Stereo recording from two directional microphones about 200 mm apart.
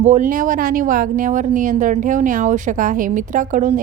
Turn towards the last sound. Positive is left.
turn(degrees=-40)  # may be behind; listen again after turning